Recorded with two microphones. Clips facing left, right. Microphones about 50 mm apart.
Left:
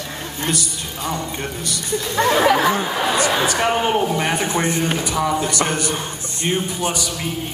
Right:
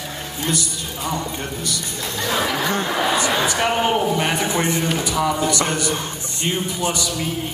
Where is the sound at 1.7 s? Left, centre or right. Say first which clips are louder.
Left 3 dB; left.